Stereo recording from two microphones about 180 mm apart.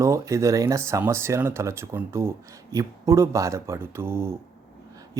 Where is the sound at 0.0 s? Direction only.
15° right (ahead or behind).